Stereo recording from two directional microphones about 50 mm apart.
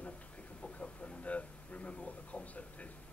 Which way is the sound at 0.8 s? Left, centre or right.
Left.